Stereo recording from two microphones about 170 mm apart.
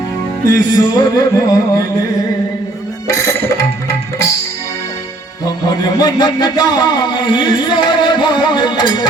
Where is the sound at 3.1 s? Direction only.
20° left (ahead or behind).